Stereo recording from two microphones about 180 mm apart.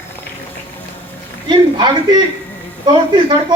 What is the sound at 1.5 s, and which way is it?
A woman's voice, 25° right (ahead or behind).